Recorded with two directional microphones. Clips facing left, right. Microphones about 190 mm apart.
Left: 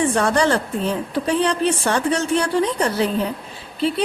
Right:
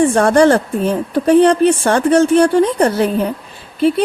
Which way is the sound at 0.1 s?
50° right (ahead or behind).